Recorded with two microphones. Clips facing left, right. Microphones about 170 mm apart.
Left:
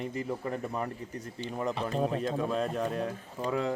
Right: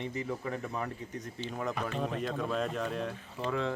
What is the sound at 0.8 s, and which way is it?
Speech, 30° left (ahead or behind).